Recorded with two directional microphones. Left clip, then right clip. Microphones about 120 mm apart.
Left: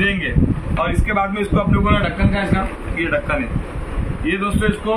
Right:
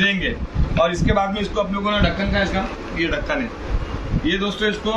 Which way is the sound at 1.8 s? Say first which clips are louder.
Left 1 dB; 20° right (ahead or behind).